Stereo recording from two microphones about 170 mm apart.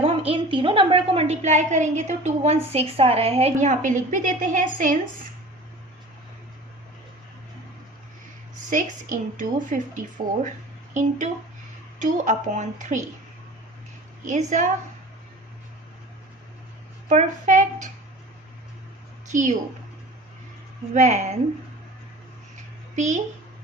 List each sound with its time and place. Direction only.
0.0 s a woman's voice: 35° right (ahead or behind); by 4.9 s 50° right (ahead or behind)
8.7 s speech: 50° right (ahead or behind)
11.9 s speech: 50° right (ahead or behind)
14.3 s speech: 45° right (ahead or behind)
17.1 s speech: 45° right (ahead or behind)
19.3 s a woman's voice: 45° right (ahead or behind)
20.9 s speech: 45° right (ahead or behind)
23.0 s speech: 45° right (ahead or behind)